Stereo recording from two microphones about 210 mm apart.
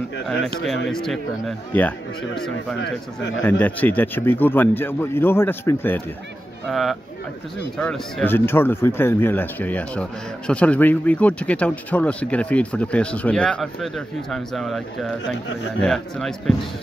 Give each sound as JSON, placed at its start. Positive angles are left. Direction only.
{"t": 0.7, "sound": "speech", "side_deg": 0}
{"t": 2.8, "sound": "a man's voice", "side_deg": 60}
{"t": 3.4, "sound": "speech", "side_deg": 10}